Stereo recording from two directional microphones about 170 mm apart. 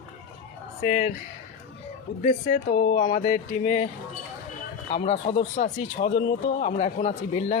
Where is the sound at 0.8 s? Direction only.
50° left (ahead or behind).